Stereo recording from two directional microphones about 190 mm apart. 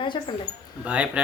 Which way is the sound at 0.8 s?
5° right (ahead or behind).